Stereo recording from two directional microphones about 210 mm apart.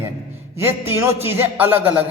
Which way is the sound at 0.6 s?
10° right (ahead or behind).